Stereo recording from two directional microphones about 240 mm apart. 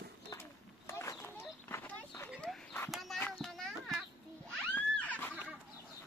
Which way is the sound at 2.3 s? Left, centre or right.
Centre.